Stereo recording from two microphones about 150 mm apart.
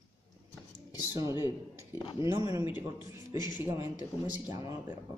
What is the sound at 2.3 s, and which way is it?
Speech, 25° right (ahead or behind).